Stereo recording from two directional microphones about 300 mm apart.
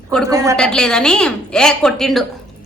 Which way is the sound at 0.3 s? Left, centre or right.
Centre.